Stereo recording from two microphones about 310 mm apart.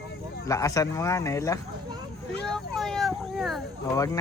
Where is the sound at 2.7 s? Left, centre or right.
Centre.